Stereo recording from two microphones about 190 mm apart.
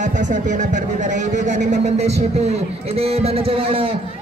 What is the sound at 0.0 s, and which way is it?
A man's voice, 40° right (ahead or behind).